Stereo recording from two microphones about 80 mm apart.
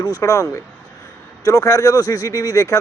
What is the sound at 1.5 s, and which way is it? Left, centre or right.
Speech, left.